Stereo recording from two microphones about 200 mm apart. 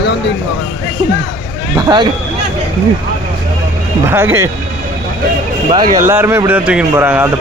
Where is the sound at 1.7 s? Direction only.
20° right (ahead or behind).